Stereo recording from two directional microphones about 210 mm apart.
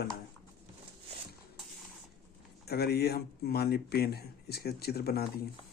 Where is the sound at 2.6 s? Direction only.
50° left (ahead or behind).